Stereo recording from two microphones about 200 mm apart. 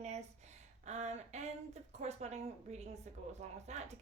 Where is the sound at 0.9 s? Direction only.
35° right (ahead or behind).